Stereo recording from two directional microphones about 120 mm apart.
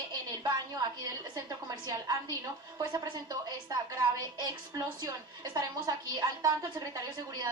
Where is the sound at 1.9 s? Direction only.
30° right (ahead or behind).